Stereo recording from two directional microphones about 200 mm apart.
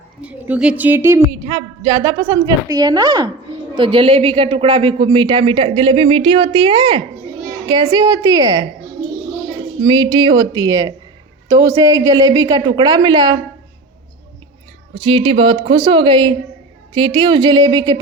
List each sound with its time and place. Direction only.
0.2 s a woman's voice: 5° right (ahead or behind)
9.8 s speech: 20° right (ahead or behind)
14.9 s speech: 25° right (ahead or behind)